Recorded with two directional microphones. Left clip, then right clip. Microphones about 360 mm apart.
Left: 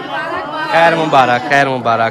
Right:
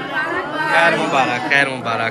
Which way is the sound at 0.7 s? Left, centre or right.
Centre.